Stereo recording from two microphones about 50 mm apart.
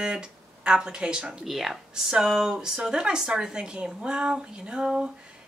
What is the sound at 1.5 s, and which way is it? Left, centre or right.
Speech, centre.